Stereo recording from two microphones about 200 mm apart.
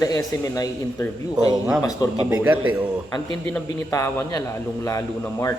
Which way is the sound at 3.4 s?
10° left (ahead or behind).